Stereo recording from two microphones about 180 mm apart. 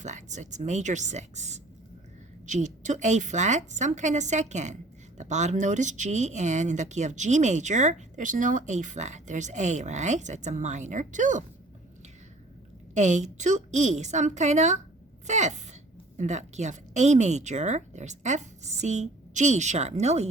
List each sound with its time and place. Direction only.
0.0 s a woman's voice: 40° right (ahead or behind)
12.9 s a woman's voice: 40° right (ahead or behind)